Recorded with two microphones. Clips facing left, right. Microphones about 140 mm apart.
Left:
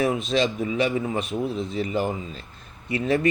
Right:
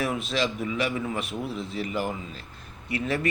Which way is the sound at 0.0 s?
20° left (ahead or behind).